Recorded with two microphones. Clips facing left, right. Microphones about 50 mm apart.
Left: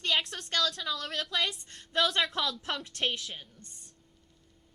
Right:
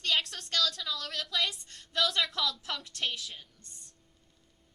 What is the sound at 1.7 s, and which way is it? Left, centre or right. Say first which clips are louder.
Speech: left 2 dB; left.